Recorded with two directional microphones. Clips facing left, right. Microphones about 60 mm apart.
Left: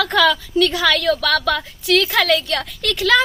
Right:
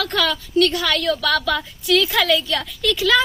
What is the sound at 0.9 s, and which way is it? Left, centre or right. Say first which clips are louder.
A woman's voice: left 2 dB; left.